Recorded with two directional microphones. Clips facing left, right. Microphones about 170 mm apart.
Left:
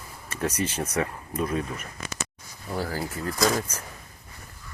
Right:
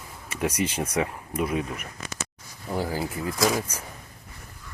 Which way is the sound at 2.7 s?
15° right (ahead or behind).